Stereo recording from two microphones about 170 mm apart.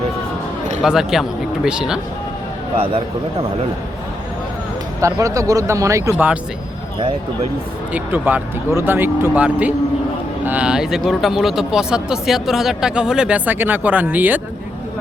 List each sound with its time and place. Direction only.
0.8 s speech: centre (ahead or behind)
5.2 s speech: 20° right (ahead or behind)
7.9 s speech: 10° right (ahead or behind)